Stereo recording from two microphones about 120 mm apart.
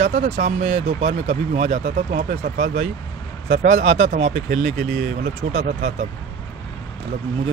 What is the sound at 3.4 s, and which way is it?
Speech, 75° right (ahead or behind).